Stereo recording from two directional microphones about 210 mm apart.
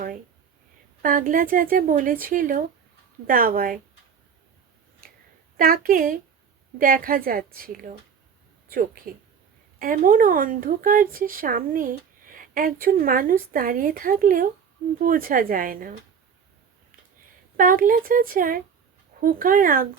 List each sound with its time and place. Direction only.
1.0 s a woman's voice: 40° right (ahead or behind)
5.5 s a woman's voice: 45° right (ahead or behind)
9.1 s a woman's voice: 45° right (ahead or behind)
17.6 s speech: 40° right (ahead or behind)